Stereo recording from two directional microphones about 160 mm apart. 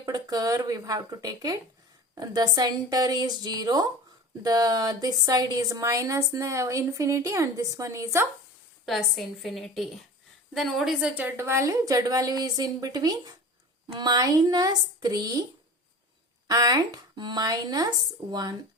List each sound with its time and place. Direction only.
0.0 s a woman's voice: 25° right (ahead or behind)
8.9 s a woman's voice: centre (ahead or behind); by 15.4 s 25° right (ahead or behind)
16.5 s a woman's voice: 25° right (ahead or behind)